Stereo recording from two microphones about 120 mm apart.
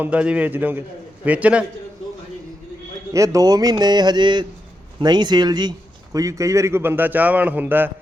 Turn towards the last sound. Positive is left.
turn(degrees=-15)  # may be behind; listen again after turning